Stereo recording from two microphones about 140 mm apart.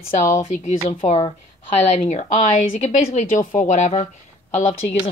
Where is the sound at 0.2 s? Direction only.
60° left (ahead or behind).